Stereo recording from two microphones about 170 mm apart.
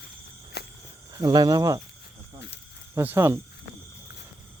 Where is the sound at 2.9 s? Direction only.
15° right (ahead or behind).